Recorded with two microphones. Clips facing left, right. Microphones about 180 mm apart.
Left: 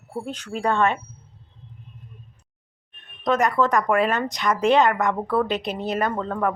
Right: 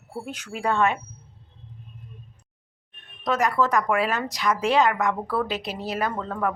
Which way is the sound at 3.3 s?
Centre (ahead or behind).